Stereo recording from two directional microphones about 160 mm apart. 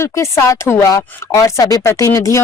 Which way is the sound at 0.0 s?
15° left (ahead or behind).